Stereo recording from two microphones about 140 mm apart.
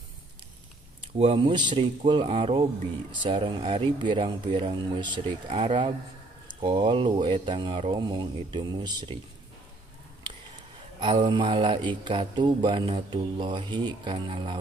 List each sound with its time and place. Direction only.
1.1 s speech: 45° right (ahead or behind)
11.0 s speech: 35° right (ahead or behind)